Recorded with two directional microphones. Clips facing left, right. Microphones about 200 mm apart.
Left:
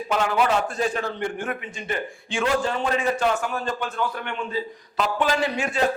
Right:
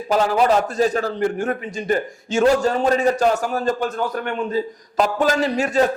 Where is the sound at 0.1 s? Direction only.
35° right (ahead or behind).